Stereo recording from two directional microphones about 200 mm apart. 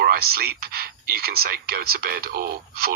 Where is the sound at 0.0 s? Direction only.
50° right (ahead or behind).